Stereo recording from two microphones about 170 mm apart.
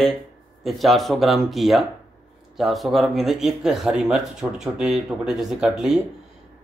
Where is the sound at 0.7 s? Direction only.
Centre (ahead or behind).